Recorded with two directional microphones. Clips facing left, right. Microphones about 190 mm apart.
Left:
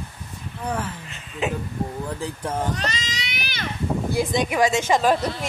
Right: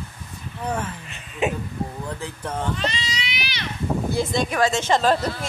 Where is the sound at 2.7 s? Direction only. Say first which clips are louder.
Right 1 dB; 45° left (ahead or behind).